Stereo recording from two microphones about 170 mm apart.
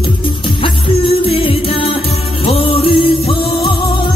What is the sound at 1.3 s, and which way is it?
Music, 30° left (ahead or behind).